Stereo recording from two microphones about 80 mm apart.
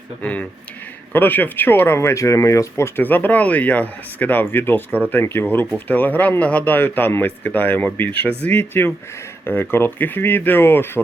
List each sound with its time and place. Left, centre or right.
0.2 s speech: centre